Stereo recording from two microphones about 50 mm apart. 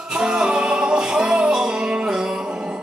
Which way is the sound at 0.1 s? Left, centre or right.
Centre.